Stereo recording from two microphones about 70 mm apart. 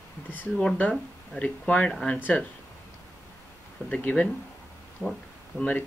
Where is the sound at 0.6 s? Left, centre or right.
Centre.